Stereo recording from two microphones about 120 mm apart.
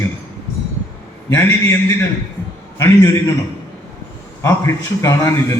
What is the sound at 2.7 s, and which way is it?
Speech, 25° left (ahead or behind).